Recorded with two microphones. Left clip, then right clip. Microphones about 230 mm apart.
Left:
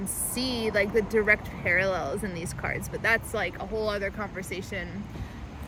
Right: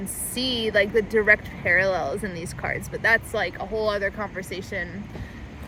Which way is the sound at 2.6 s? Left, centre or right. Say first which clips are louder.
Right 4 dB; centre.